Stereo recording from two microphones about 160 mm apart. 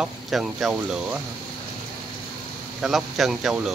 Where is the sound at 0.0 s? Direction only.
Centre (ahead or behind).